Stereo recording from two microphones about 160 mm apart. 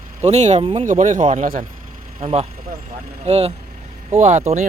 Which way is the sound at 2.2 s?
35° right (ahead or behind).